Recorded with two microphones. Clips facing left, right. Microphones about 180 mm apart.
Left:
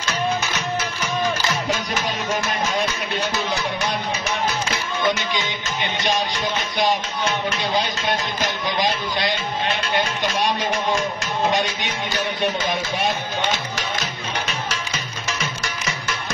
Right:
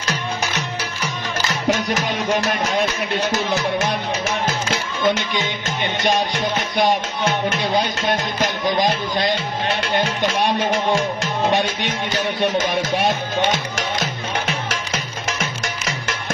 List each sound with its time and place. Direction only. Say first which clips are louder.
5.0 s music: right 3 dB; 55° right (ahead or behind)
8.6 s music: right 4 dB; 50° right (ahead or behind)
11.5 s music: right 3 dB; 50° right (ahead or behind)